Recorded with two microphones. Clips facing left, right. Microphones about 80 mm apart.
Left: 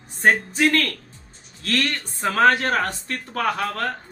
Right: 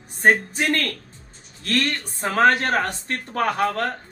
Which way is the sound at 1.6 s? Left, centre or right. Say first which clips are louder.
Right 1 dB; right.